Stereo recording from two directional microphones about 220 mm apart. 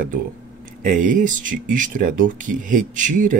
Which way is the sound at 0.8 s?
35° right (ahead or behind).